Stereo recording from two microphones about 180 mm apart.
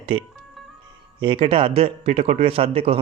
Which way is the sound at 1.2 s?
30° right (ahead or behind).